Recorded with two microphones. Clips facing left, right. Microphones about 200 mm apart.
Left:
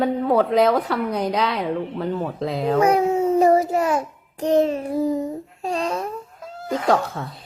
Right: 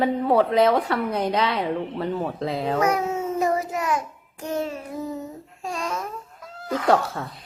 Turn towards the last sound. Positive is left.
turn(degrees=0)  # may be behind; listen again after turning